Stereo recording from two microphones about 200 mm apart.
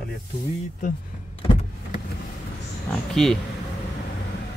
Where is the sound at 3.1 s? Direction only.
Centre (ahead or behind).